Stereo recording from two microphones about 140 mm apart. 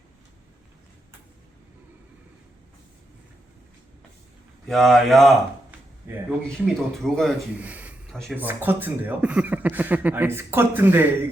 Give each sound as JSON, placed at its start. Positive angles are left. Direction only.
{"t": 4.7, "sound": "speech", "side_deg": 0}
{"t": 6.5, "sound": "speech", "side_deg": 0}
{"t": 7.5, "sound": "a sound", "side_deg": -10}
{"t": 8.1, "sound": "speech", "side_deg": 0}
{"t": 8.4, "sound": "a man's voice", "side_deg": -15}